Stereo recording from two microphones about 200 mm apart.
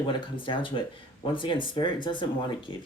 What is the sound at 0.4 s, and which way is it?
Speech, 25° left (ahead or behind).